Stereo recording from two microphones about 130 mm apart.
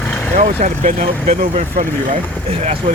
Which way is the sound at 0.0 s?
10° left (ahead or behind).